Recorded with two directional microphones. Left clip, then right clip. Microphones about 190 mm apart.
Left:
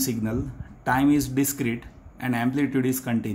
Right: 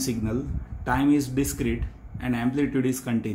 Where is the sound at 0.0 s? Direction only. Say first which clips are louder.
Left 1 dB; 35° left (ahead or behind).